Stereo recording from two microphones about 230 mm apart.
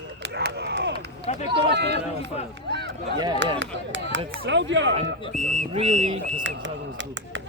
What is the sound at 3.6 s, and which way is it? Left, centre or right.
Speech, right.